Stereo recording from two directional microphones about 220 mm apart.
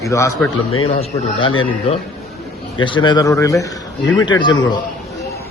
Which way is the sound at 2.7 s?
20° left (ahead or behind).